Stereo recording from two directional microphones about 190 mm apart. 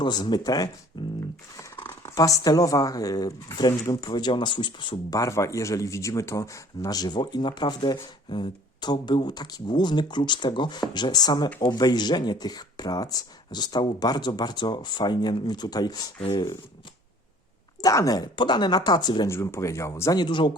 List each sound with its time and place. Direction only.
0.0 s speech: 20° left (ahead or behind)
0.9 s music: 25° left (ahead or behind)
1.5 s speech: 15° left (ahead or behind)
17.7 s speech: 20° left (ahead or behind)